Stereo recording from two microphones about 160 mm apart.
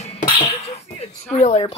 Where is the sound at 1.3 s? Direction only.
40° left (ahead or behind).